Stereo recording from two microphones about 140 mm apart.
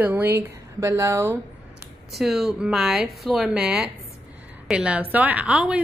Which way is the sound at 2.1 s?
Centre (ahead or behind).